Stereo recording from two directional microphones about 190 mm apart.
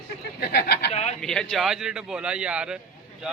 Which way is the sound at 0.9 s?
35° left (ahead or behind).